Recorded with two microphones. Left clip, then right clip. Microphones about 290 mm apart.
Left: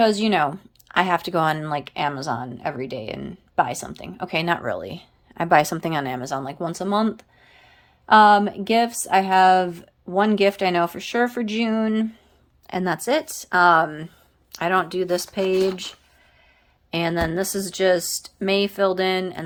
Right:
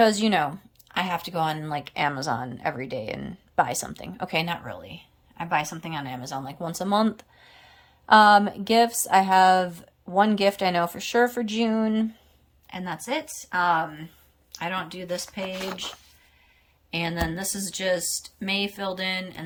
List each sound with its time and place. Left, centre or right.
0.0 s speech: centre
12.6 s a woman's voice: centre